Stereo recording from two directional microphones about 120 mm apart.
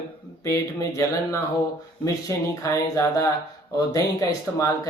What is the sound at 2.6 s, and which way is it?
Speech, 25° left (ahead or behind).